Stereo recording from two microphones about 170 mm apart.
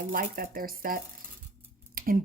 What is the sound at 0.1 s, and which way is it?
Speech, 55° right (ahead or behind).